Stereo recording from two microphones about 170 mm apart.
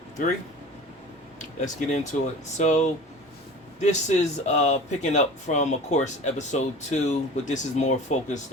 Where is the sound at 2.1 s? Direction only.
45° left (ahead or behind).